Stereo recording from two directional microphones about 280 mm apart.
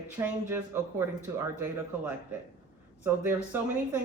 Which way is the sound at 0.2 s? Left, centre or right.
Centre.